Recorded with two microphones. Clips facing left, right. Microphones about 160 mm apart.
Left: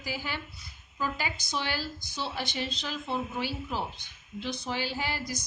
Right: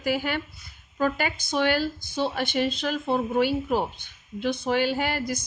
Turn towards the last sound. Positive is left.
turn(degrees=-55)  # may be behind; listen again after turning